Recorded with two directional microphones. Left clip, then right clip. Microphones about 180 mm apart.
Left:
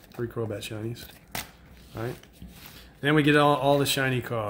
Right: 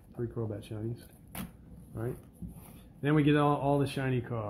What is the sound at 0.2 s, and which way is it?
Speech, 35° left (ahead or behind).